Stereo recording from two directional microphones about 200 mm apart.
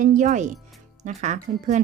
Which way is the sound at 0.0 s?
40° right (ahead or behind).